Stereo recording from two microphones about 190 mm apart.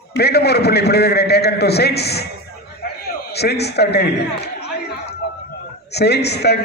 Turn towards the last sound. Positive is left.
turn(degrees=60)  # may be behind; listen again after turning